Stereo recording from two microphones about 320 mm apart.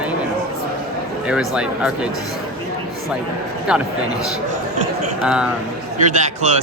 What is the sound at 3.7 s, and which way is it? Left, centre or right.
Speech, centre.